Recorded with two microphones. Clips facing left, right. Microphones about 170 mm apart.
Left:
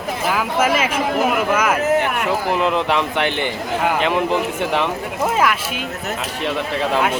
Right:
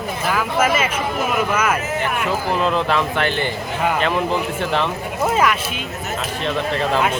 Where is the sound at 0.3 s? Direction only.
10° left (ahead or behind).